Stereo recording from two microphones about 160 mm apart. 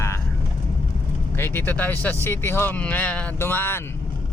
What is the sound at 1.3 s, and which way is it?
Speech, 15° left (ahead or behind).